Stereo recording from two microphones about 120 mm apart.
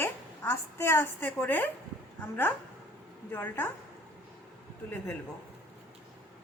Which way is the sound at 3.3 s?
15° left (ahead or behind).